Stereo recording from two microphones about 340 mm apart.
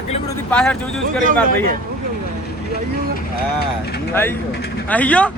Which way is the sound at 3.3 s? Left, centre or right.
Left.